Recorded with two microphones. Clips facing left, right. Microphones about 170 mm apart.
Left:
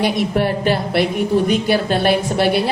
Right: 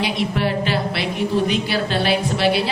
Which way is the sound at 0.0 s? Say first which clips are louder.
Left 4 dB; 50° left (ahead or behind).